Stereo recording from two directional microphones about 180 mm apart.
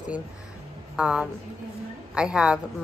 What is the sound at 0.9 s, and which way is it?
A woman's voice, 5° right (ahead or behind).